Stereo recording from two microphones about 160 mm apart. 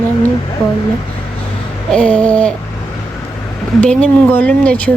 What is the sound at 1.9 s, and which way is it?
Speech, 5° left (ahead or behind).